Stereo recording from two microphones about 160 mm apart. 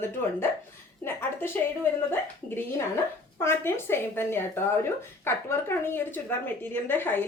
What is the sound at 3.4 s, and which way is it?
Speech, 15° left (ahead or behind).